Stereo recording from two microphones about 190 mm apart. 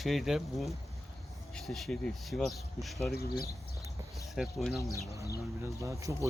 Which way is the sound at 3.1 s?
55° left (ahead or behind).